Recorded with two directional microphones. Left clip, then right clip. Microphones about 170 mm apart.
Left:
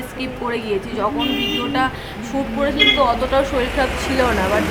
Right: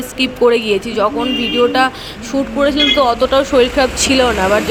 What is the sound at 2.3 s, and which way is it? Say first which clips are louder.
A woman's voice: right 6 dB; 40° right (ahead or behind).